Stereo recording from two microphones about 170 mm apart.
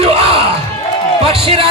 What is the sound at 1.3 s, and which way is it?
Music, 35° right (ahead or behind).